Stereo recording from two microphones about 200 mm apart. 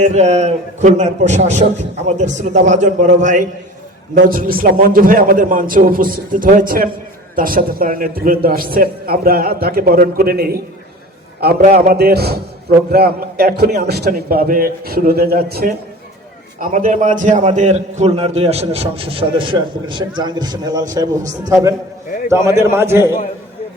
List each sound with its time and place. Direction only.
0.1 s a man's voice: 35° right (ahead or behind); by 23.1 s 10° right (ahead or behind)